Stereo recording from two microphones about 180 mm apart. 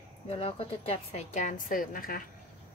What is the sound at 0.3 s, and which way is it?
A woman's voice, 30° left (ahead or behind).